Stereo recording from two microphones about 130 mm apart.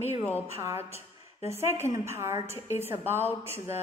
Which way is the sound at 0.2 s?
15° left (ahead or behind).